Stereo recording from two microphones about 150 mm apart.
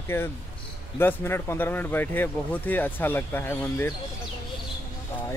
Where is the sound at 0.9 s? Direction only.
15° left (ahead or behind).